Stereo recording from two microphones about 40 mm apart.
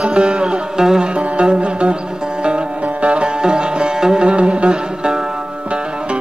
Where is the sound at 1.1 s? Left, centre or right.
Right.